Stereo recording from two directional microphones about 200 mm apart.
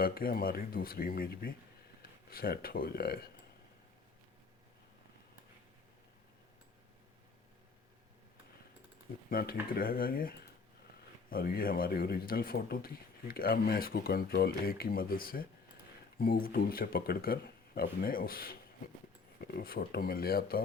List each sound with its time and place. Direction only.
0.0 s speech: 45° left (ahead or behind)
9.3 s speech: 45° left (ahead or behind)